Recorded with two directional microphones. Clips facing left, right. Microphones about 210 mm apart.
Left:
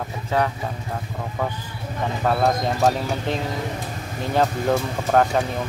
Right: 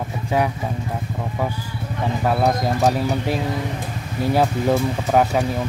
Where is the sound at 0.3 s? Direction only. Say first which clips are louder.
Right 2 dB; 10° right (ahead or behind).